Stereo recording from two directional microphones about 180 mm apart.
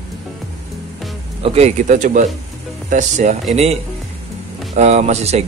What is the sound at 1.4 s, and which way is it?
Speech, 35° right (ahead or behind).